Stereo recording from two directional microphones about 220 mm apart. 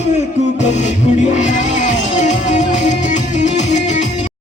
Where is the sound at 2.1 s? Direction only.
35° left (ahead or behind).